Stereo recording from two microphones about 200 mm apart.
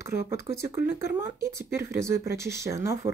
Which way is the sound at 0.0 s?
15° right (ahead or behind).